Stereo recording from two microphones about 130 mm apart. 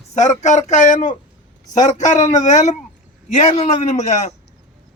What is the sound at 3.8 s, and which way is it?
Speech, 65° left (ahead or behind).